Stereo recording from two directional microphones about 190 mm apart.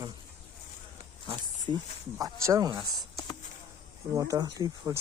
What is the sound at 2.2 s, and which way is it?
Speech, 20° right (ahead or behind).